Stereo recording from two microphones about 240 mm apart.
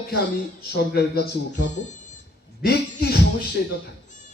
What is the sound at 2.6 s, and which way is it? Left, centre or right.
Music, left.